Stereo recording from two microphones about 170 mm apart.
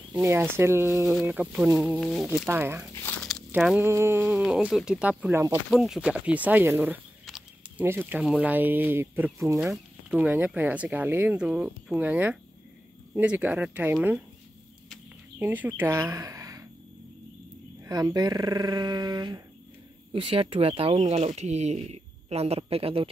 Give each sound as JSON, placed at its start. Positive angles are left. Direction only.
{"t": 0.1, "sound": "speech", "side_deg": -10}
{"t": 2.5, "sound": "speech", "side_deg": -15}
{"t": 2.9, "sound": "speech", "side_deg": 10}
{"t": 3.5, "sound": "speech", "side_deg": -10}
{"t": 5.7, "sound": "speech", "side_deg": -5}
{"t": 7.2, "sound": "snake", "side_deg": 0}
{"t": 7.8, "sound": "speech", "side_deg": -15}
{"t": 15.3, "sound": "speech", "side_deg": -10}
{"t": 17.8, "sound": "speech", "side_deg": -20}